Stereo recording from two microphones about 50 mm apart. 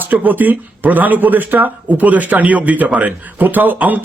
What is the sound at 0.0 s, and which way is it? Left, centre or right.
Speech, right.